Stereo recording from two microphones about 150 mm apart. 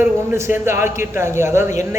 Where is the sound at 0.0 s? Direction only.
15° right (ahead or behind).